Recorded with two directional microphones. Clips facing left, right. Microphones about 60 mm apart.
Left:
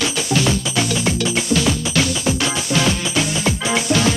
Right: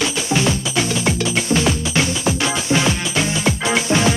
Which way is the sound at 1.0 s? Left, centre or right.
Right.